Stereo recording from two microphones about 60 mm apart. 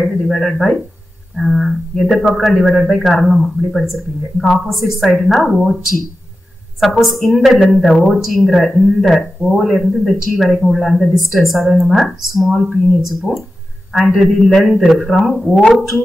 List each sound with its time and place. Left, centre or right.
0.0 s speech: centre
7.0 s speech: centre